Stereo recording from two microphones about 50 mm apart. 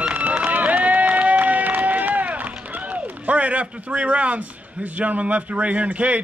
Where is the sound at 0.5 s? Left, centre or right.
Right.